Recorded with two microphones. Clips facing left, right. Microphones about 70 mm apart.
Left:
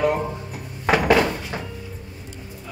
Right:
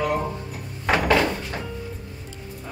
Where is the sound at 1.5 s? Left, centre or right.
Centre.